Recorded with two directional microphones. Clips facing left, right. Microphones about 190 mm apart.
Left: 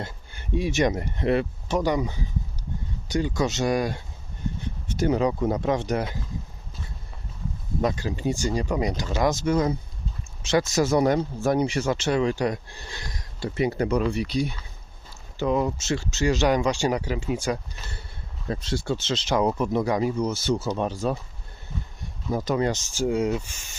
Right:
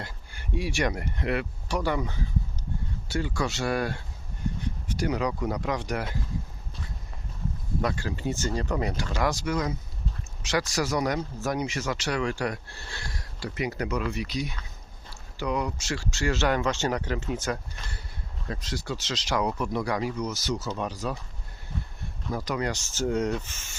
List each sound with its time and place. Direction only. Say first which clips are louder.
0.0 s speech: left 4 dB; 20° left (ahead or behind)
4.9 s speech: left 6 dB; 25° left (ahead or behind)
7.8 s speech: left 4 dB; 20° left (ahead or behind)
18.4 s speech: left 6 dB; 25° left (ahead or behind)
22.3 s speech: left 5 dB; 25° left (ahead or behind)